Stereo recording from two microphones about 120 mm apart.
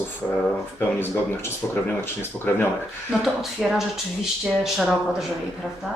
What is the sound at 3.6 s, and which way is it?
Speech, 5° right (ahead or behind).